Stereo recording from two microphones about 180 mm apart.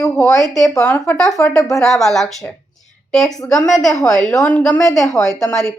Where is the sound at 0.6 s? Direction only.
15° left (ahead or behind).